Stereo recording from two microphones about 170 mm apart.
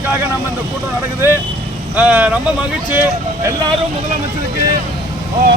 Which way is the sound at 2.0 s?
10° right (ahead or behind).